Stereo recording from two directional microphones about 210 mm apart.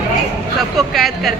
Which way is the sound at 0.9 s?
Centre (ahead or behind).